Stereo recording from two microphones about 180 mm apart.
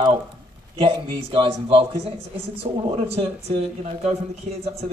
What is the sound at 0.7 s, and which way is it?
Speech, 30° right (ahead or behind).